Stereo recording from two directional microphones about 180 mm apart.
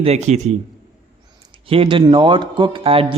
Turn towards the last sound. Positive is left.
turn(degrees=-30)  # may be behind; listen again after turning